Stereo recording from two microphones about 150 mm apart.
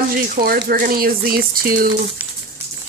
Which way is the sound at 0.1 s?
85° right.